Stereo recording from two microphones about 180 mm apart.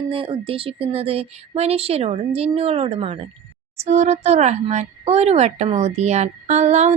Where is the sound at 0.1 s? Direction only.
30° right (ahead or behind).